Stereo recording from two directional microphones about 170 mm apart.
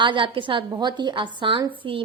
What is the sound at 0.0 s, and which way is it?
A woman's voice, 30° right (ahead or behind).